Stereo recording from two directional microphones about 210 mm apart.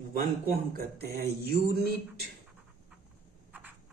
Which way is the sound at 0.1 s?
45° right (ahead or behind).